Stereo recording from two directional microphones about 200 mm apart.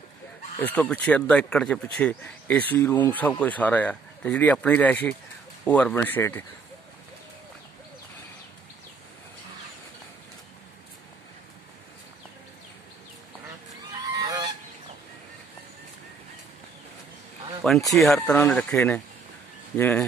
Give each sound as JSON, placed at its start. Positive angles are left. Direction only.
{"t": 0.6, "sound": "speech", "side_deg": 5}
{"t": 13.9, "sound": "goose", "side_deg": -20}
{"t": 17.6, "sound": "speech", "side_deg": 0}